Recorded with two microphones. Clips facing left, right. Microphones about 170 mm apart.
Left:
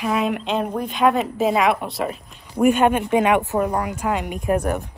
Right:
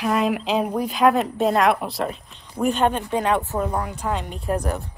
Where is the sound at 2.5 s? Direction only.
15° left (ahead or behind).